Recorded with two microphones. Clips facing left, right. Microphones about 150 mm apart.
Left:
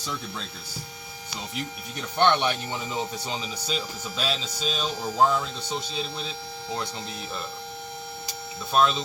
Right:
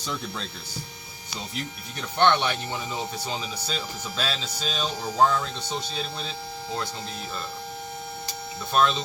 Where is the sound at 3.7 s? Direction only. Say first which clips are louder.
Left 2 dB; 5° left (ahead or behind).